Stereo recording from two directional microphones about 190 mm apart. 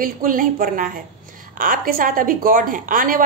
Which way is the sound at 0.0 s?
45° right (ahead or behind).